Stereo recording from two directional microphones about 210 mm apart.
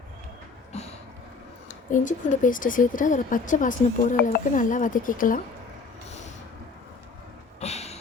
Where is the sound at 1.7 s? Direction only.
40° left (ahead or behind).